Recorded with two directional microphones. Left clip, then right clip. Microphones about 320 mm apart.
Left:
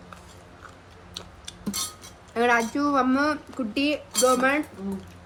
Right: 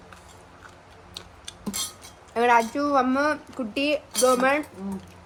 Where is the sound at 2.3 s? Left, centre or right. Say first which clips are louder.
Right 2 dB; centre.